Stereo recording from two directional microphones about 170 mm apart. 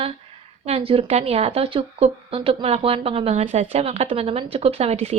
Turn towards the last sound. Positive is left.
turn(degrees=-40)  # may be behind; listen again after turning